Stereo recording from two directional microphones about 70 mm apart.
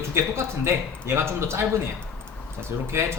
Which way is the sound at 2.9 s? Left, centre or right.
Right.